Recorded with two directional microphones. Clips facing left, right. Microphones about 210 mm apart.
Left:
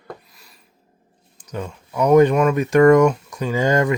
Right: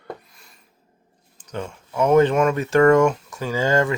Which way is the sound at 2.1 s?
15° left (ahead or behind).